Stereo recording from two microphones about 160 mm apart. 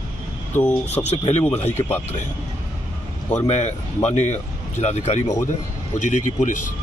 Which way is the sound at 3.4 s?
45° left (ahead or behind).